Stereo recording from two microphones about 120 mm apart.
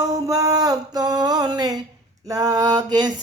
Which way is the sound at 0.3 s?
30° right (ahead or behind).